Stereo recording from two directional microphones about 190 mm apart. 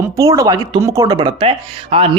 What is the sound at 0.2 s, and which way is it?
A man's voice, 20° right (ahead or behind).